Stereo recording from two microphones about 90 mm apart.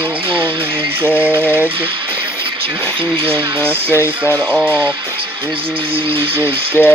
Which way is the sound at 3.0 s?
85° right.